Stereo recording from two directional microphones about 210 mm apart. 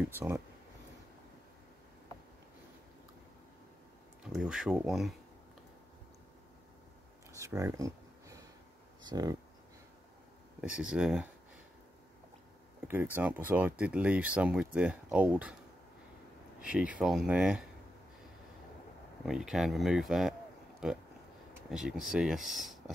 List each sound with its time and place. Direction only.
0.0 s speech: 10° right (ahead or behind)
4.3 s speech: 5° right (ahead or behind)
7.3 s a sound: 15° right (ahead or behind)
9.0 s speech: 20° right (ahead or behind)
10.6 s speech: 5° right (ahead or behind)
12.8 s speech: 10° right (ahead or behind)
16.6 s speech: 5° right (ahead or behind)
19.2 s speech: centre (ahead or behind)